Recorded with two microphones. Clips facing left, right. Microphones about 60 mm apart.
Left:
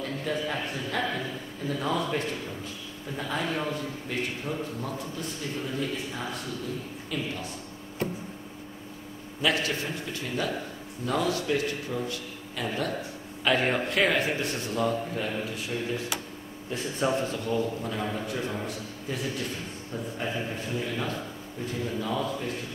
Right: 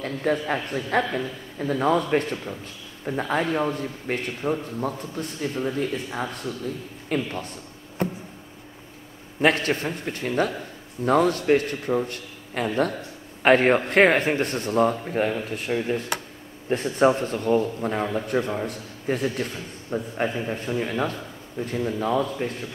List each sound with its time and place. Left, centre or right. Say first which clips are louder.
0.0 s a man's voice: right 5 dB; right
9.4 s a man's voice: right 6 dB; right
18.7 s a man's voice: right 6 dB; right